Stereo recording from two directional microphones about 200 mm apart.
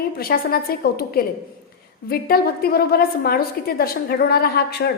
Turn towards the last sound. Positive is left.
turn(degrees=55)  # may be behind; listen again after turning